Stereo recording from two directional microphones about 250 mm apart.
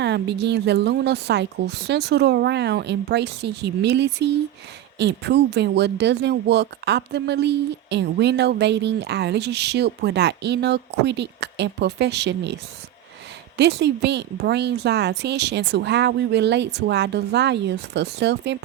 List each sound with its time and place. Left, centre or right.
0.0 s speech: right
13.6 s speech: right